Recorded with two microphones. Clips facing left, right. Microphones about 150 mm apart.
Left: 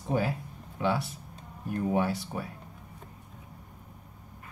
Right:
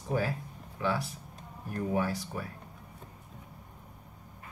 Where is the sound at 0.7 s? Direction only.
25° left (ahead or behind).